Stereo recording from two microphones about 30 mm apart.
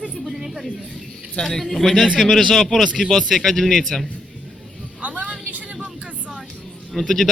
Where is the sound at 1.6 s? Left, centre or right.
Centre.